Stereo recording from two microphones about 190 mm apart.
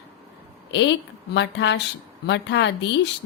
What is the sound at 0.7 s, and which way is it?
A woman's voice, 70° left (ahead or behind).